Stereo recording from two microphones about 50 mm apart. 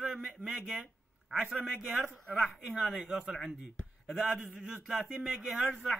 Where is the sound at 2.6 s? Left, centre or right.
Right; by 4.4 s centre.